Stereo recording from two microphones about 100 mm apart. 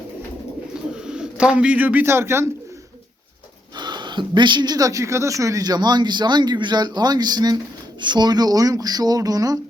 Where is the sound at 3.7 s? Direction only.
50° right (ahead or behind).